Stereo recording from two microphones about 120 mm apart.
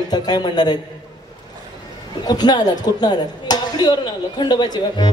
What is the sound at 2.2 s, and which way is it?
A woman's voice, 35° left (ahead or behind).